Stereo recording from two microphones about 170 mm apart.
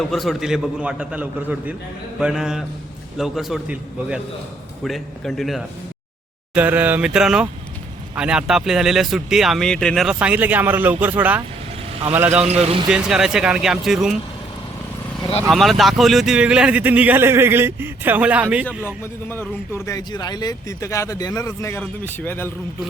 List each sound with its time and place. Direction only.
0.1 s speech: centre (ahead or behind)
12.5 s speech: 40° right (ahead or behind)
12.9 s speech: 5° right (ahead or behind)
15.4 s speech: centre (ahead or behind)
19.3 s speech: 15° left (ahead or behind)